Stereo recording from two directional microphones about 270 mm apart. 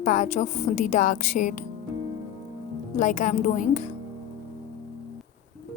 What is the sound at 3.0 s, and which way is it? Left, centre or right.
Speech, left.